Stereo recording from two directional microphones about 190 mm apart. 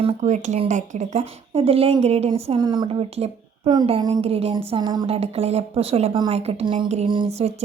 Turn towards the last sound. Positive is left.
turn(degrees=-35)  # may be behind; listen again after turning